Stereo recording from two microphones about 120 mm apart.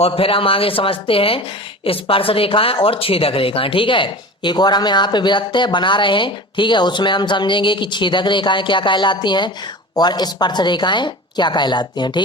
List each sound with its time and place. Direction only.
0.0 s a woman's voice: 50° left (ahead or behind)